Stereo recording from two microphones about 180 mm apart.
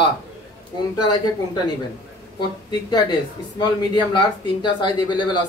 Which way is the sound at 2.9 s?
25° left (ahead or behind).